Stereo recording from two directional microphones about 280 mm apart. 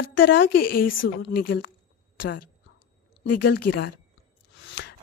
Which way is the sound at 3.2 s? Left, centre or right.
Left.